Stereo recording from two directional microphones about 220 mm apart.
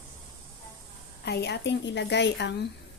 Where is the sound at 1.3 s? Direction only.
50° left (ahead or behind).